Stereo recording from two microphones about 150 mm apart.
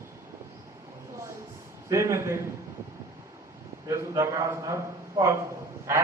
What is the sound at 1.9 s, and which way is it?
Speech, 20° right (ahead or behind).